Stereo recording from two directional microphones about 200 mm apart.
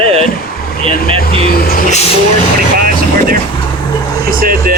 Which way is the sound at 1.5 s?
45° left (ahead or behind).